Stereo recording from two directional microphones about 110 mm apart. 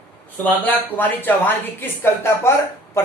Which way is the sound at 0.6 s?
15° left (ahead or behind).